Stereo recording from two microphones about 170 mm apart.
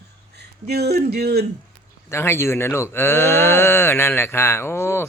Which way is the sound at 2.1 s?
15° left (ahead or behind).